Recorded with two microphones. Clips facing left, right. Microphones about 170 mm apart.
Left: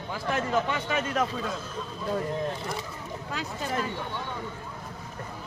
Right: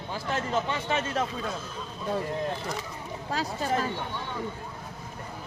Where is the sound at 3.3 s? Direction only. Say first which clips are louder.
Right 3 dB; 35° right (ahead or behind).